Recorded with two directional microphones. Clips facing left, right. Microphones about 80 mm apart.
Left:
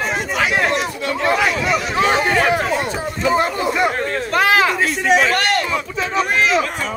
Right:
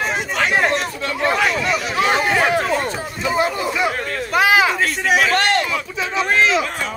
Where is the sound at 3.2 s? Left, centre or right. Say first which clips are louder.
Left 2 dB; left.